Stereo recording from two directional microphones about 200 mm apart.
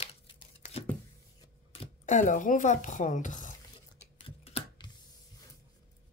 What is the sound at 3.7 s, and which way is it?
Scissors, 30° left (ahead or behind).